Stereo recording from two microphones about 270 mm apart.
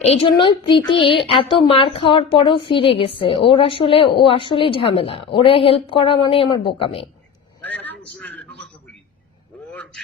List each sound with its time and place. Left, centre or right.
0.0 s a woman's voice: left
7.6 s vehicle: centre
8.2 s a sound: centre
9.7 s vehicle: centre